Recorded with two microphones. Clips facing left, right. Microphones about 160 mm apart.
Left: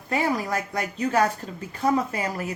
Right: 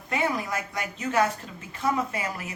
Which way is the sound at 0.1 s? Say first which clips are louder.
Left 3 dB; 35° left (ahead or behind).